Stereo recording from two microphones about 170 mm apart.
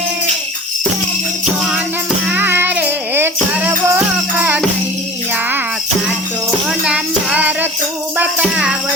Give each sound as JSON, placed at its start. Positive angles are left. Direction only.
{"t": 2.2, "sound": "music", "side_deg": -10}
{"t": 6.7, "sound": "music", "side_deg": -5}